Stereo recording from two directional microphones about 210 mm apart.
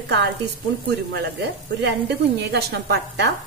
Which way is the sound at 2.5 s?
50° right (ahead or behind).